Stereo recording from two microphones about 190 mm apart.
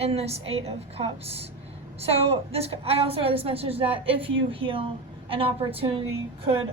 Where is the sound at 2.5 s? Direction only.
30° right (ahead or behind).